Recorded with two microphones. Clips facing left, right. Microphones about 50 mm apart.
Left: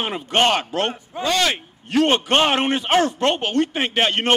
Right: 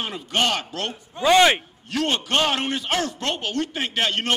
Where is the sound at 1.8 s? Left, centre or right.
Left.